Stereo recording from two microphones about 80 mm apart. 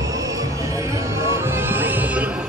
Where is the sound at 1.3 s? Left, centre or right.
Right.